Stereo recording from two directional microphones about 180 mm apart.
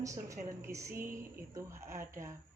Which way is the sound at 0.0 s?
15° right (ahead or behind).